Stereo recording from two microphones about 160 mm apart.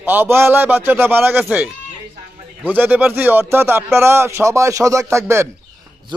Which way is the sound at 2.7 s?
10° right (ahead or behind).